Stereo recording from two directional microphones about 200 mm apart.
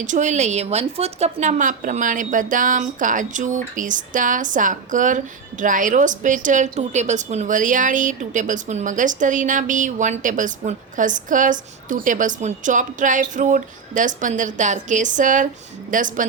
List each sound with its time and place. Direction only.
0.0 s a woman's voice: 40° right (ahead or behind)